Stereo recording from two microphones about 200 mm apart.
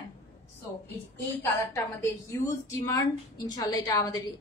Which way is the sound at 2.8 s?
15° left (ahead or behind).